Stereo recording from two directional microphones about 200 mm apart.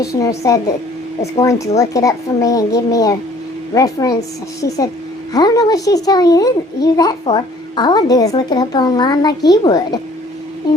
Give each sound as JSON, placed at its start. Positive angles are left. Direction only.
{"t": 0.0, "sound": "a child's voice", "side_deg": 15}